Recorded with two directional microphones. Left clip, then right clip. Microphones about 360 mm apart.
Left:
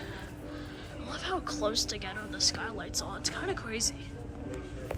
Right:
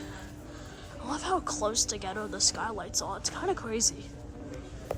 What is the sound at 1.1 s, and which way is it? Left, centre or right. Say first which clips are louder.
Speech: right 4 dB; centre.